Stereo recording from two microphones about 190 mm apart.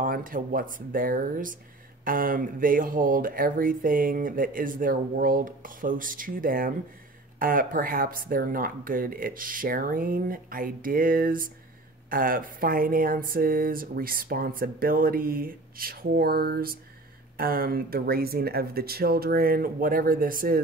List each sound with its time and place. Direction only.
0.0 s speech: 45° right (ahead or behind)